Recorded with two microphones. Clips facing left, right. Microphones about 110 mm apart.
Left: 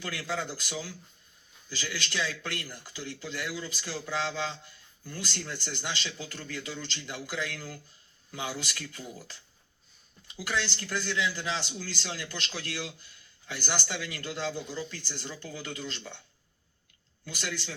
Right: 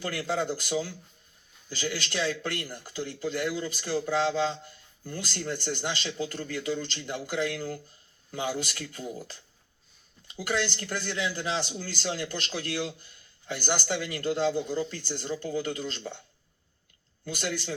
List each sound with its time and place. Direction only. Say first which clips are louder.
0.0 s speech: right 5 dB; 45° right (ahead or behind)
17.2 s speech: right 5 dB; 45° right (ahead or behind)